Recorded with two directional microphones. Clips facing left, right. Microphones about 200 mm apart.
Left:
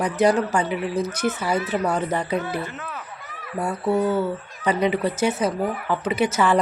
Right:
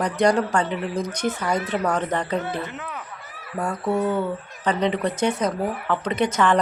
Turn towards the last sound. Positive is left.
turn(degrees=10)  # may be behind; listen again after turning